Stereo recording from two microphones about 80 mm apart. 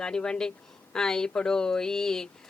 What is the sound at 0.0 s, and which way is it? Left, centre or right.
A man's voice, centre.